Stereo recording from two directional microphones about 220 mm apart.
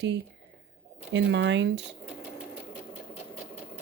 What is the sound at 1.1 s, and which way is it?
Speech, 55° right (ahead or behind).